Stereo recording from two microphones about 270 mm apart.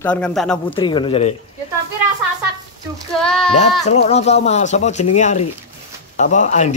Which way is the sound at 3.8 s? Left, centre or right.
Left.